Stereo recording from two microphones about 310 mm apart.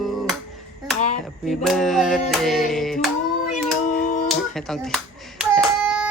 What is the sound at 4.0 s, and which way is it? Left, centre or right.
Music, left.